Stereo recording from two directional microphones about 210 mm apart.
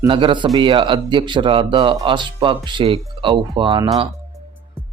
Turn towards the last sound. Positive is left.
turn(degrees=-25)  # may be behind; listen again after turning